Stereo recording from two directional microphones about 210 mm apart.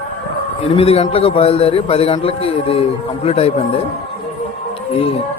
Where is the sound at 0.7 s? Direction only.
30° left (ahead or behind).